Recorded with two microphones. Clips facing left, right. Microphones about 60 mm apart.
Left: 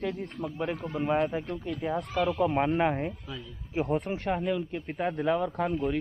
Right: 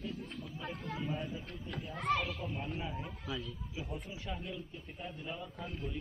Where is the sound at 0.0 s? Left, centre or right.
Left.